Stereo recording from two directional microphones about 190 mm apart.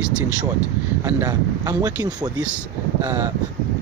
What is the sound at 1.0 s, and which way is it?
Speech, 15° right (ahead or behind).